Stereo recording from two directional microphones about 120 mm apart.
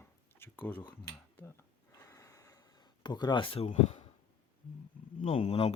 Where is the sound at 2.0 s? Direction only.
25° left (ahead or behind).